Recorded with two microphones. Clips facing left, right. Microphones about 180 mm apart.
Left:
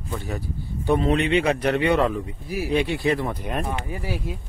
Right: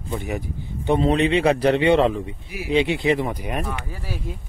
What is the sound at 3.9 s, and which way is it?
Speech, 15° left (ahead or behind).